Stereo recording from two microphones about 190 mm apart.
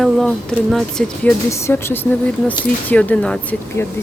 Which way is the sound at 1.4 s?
15° left (ahead or behind).